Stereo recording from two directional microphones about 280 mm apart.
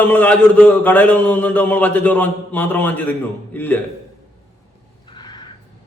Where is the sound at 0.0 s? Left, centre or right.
Centre.